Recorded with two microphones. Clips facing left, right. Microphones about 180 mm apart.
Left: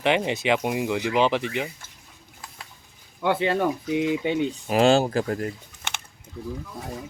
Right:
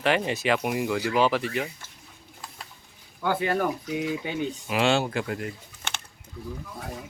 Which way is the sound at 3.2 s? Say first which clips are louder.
Left 3 dB; 25° left (ahead or behind).